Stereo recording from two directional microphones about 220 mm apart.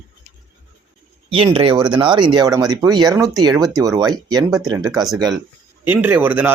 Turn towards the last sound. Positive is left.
turn(degrees=-10)  # may be behind; listen again after turning